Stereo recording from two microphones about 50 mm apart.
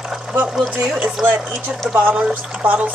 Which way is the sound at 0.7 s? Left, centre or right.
Right.